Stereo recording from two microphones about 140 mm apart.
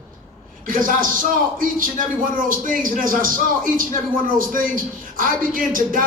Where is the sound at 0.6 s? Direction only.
75° right (ahead or behind).